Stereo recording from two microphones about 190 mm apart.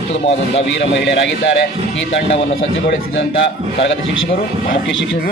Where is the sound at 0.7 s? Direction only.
65° left (ahead or behind).